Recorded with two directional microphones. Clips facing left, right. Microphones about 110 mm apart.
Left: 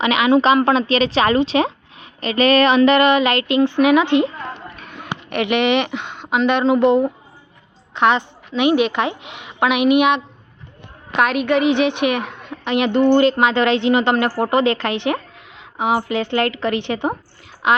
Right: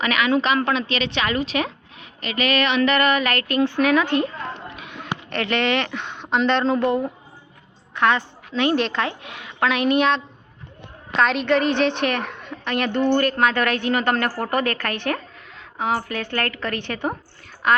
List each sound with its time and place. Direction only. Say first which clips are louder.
0.0 s a woman's voice: left 6 dB; 25° left (ahead or behind)
5.3 s a woman's voice: left 5 dB; 15° left (ahead or behind)
6.8 s a woman's voice: left 7 dB; 20° left (ahead or behind)